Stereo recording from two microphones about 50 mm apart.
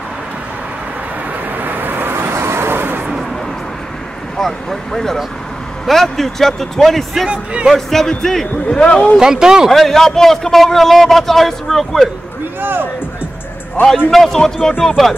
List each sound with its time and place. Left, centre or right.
1.6 s vehicle: right
4.4 s vehicle: centre
5.9 s a man's voice: centre
9.2 s speech: centre
9.7 s a man's voice: centre
13.8 s a man's voice: left
14.1 s speech: centre